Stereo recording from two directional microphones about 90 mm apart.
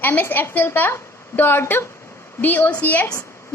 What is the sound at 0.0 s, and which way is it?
A woman's voice, 25° left (ahead or behind).